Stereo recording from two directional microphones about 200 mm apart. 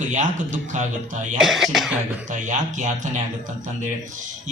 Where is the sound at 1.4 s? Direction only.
Centre (ahead or behind).